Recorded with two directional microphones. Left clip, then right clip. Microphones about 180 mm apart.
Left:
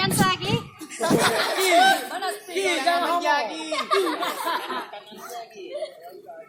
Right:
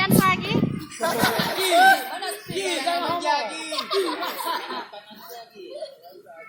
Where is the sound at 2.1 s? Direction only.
20° right (ahead or behind).